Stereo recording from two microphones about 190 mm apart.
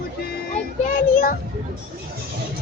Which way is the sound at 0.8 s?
45° left (ahead or behind).